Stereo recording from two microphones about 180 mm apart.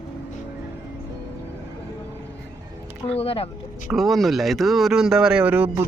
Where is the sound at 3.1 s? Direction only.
35° left (ahead or behind).